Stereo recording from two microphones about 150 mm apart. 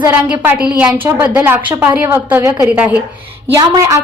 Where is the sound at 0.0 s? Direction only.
15° right (ahead or behind).